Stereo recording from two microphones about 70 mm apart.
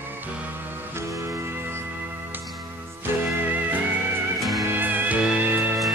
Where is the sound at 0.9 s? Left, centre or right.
Right.